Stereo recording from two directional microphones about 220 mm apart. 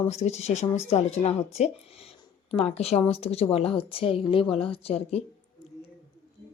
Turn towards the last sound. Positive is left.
turn(degrees=25)  # may be behind; listen again after turning